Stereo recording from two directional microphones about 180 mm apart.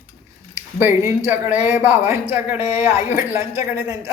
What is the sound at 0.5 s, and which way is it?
A woman's voice, 15° right (ahead or behind).